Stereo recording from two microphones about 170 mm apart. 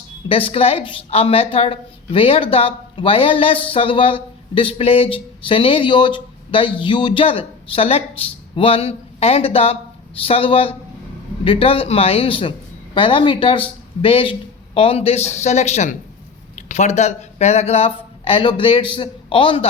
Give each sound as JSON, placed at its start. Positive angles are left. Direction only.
{"t": 0.3, "sound": "a woman's voice", "side_deg": 35}